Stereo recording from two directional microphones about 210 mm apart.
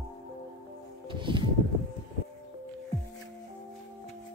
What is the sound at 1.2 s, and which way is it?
Music, 25° right (ahead or behind).